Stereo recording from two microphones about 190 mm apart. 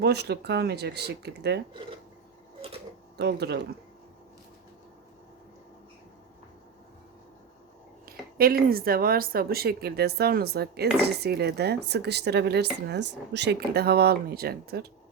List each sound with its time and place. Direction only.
0.0 s speech: 60° right (ahead or behind)
3.2 s speech: 60° right (ahead or behind)
8.4 s speech: 50° right (ahead or behind)